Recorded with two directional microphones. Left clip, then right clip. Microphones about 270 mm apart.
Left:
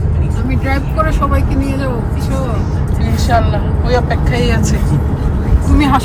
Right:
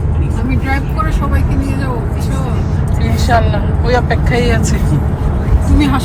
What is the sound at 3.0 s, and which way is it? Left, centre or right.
Vehicle, centre.